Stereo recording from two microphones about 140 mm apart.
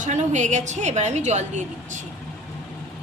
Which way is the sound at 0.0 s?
60° right (ahead or behind).